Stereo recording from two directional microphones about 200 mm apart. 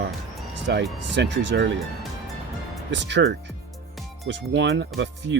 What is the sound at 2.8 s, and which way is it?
Speech, 60° right (ahead or behind).